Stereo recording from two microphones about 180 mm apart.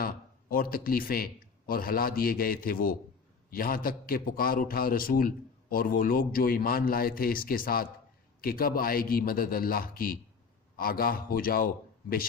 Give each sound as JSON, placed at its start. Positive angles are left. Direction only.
{"t": 0.0, "sound": "a man's voice", "side_deg": 55}